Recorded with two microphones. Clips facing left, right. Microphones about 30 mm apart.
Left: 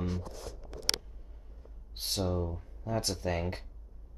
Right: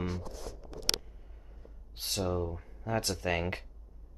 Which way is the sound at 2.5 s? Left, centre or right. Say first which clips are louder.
Right 1 dB; right.